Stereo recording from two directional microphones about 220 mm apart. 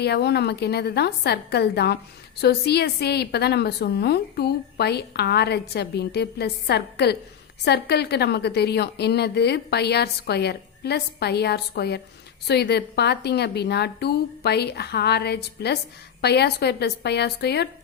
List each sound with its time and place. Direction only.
0.0 s a woman's voice: 50° left (ahead or behind)